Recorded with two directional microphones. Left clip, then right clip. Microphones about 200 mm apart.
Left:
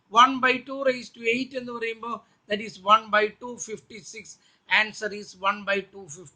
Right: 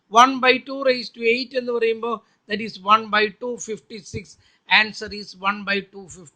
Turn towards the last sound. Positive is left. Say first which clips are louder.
# right 3 dB
turn(degrees=-40)  # may be behind; listen again after turning